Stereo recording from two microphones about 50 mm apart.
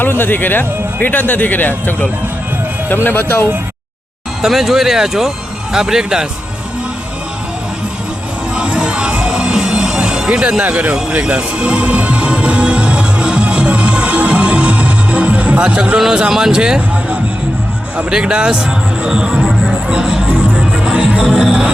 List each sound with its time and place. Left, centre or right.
0.0 s speech: left
4.4 s speech: centre
8.5 s music: right
10.6 s speech: right
10.9 s music: right
15.6 s speech: centre
18.1 s speech: centre
19.0 s music: centre
19.9 s speech: centre
20.5 s music: centre
21.2 s music: centre